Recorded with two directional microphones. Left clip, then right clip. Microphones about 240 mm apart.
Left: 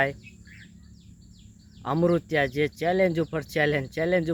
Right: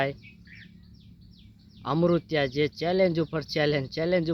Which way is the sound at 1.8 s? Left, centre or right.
Centre.